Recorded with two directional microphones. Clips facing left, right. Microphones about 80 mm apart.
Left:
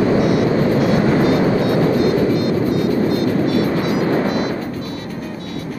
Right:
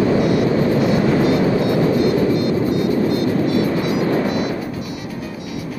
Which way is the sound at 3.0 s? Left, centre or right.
Left.